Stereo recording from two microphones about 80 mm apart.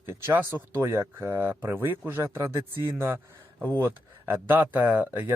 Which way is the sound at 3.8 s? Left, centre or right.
Right.